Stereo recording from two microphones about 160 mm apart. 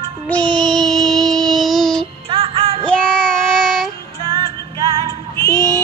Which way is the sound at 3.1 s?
Centre (ahead or behind).